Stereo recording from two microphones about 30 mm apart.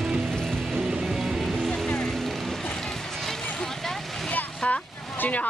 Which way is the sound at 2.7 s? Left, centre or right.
Centre.